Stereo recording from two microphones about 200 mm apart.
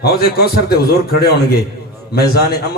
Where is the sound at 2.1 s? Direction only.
50° left (ahead or behind).